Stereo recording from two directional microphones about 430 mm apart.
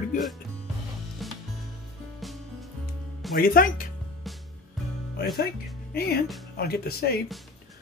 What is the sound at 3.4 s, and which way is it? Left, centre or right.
Speech, centre.